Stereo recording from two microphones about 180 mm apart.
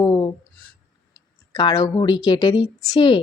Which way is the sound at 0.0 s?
25° left (ahead or behind).